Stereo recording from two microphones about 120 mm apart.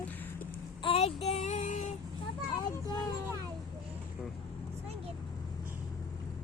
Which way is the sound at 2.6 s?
35° left (ahead or behind).